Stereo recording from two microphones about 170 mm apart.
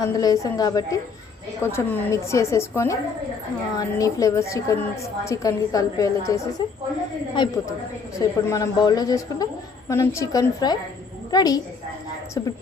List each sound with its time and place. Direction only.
0.0 s a woman's voice: 20° left (ahead or behind)